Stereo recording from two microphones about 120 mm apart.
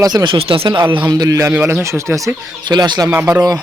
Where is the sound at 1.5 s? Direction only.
15° right (ahead or behind).